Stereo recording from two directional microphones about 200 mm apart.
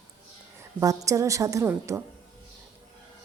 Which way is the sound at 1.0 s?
15° right (ahead or behind).